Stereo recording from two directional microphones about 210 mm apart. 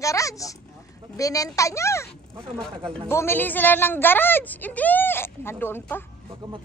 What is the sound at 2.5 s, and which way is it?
A woman's voice, centre (ahead or behind).